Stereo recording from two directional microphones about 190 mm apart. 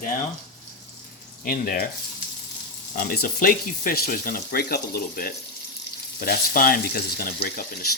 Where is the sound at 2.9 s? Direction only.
55° left (ahead or behind).